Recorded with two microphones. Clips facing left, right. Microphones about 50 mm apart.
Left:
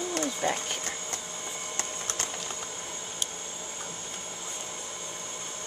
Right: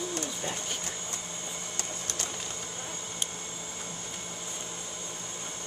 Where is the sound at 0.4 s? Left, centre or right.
Left.